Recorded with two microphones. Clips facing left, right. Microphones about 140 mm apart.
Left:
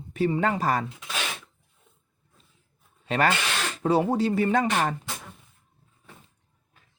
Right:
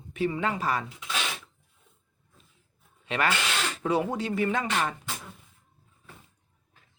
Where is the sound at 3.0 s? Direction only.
40° left (ahead or behind).